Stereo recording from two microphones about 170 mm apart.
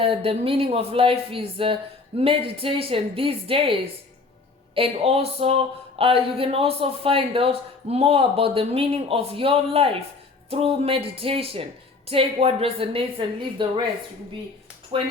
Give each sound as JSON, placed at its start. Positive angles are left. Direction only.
{"t": 0.0, "sound": "speech", "side_deg": -35}
{"t": 14.9, "sound": "speech", "side_deg": -30}